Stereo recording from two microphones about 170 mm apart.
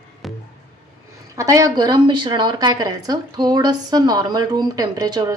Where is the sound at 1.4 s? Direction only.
20° right (ahead or behind).